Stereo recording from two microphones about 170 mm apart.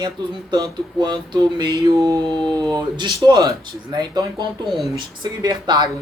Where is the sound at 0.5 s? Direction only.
25° right (ahead or behind).